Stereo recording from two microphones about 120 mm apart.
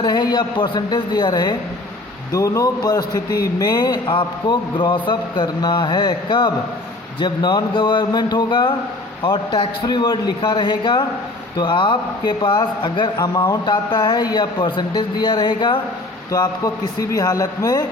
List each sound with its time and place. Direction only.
0.0 s a man's voice: 35° left (ahead or behind)
16.3 s a man's voice: 30° left (ahead or behind)